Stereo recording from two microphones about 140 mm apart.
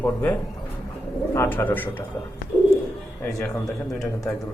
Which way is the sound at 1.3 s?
15° left (ahead or behind).